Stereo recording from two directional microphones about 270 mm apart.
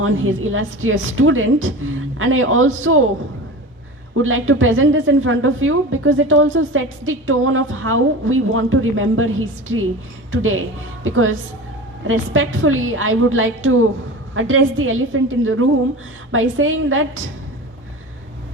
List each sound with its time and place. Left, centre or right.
0.0 s a woman's voice: right
4.2 s a woman's voice: right